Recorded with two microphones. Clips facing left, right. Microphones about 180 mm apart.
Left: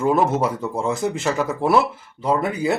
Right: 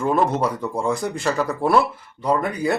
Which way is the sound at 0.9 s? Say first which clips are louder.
Left 2 dB; 25° left (ahead or behind).